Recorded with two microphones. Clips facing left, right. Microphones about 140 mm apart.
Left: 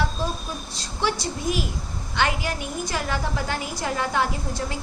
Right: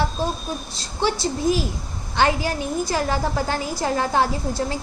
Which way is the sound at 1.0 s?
30° right (ahead or behind).